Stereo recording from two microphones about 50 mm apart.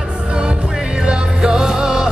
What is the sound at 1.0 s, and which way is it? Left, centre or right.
Music, centre.